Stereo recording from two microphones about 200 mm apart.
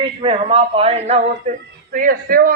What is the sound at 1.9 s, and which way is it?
Speech, 45° right (ahead or behind).